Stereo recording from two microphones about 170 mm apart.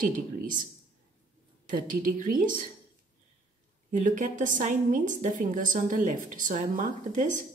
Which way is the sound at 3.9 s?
50° right (ahead or behind).